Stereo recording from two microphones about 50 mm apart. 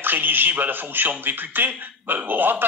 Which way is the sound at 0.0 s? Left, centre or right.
Right.